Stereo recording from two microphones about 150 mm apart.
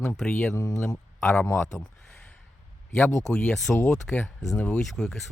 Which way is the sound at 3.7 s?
20° left (ahead or behind).